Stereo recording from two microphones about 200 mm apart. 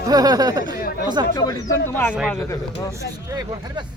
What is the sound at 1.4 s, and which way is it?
Speech, 15° left (ahead or behind).